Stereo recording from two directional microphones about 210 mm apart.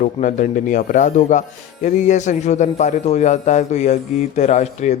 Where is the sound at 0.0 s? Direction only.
35° left (ahead or behind).